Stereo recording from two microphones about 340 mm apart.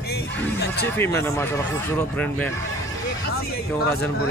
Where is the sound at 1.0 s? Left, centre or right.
Centre.